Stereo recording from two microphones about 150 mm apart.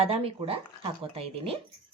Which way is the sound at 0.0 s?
40° right (ahead or behind).